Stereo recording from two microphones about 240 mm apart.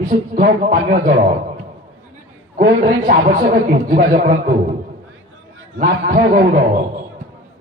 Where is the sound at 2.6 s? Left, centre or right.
Right.